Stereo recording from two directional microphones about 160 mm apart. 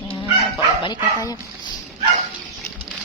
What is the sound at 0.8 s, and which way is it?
Speech, 25° left (ahead or behind).